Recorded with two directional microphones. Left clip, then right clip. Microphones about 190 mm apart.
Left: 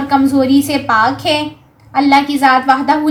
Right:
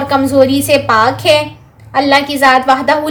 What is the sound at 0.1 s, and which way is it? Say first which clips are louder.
A woman's voice: right 2 dB; 40° right (ahead or behind).